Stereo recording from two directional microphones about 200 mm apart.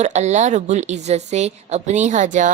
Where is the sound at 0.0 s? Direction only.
35° right (ahead or behind).